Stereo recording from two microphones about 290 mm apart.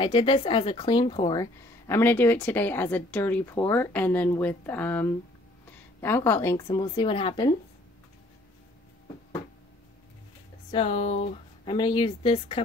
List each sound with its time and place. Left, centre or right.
0.0 s a woman's voice: centre
10.7 s speech: left